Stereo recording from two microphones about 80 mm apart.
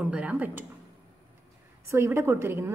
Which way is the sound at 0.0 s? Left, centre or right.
Centre.